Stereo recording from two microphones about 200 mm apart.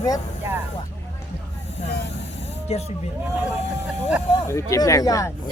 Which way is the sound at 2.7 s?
30° left (ahead or behind).